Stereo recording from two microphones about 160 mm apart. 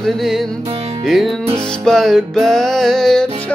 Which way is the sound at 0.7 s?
40° right (ahead or behind).